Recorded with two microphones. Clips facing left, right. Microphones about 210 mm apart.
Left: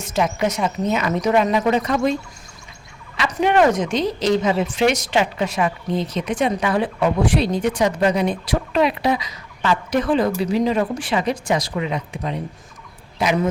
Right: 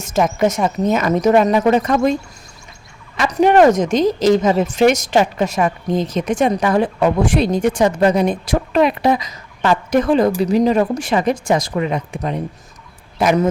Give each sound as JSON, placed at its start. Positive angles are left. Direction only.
{"t": 0.0, "sound": "a woman's voice", "side_deg": -45}
{"t": 3.2, "sound": "a woman's voice", "side_deg": -40}